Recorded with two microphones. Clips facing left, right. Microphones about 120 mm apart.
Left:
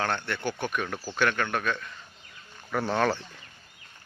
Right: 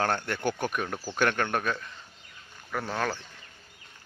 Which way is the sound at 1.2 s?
45° right (ahead or behind).